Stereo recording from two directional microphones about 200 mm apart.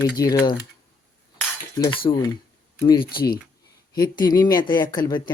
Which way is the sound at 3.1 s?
50° left (ahead or behind).